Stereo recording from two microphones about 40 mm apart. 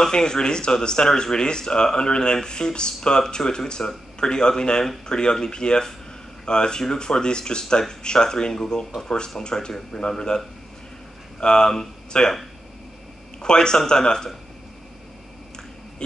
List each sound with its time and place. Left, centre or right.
0.0 s speech: centre
13.4 s speech: centre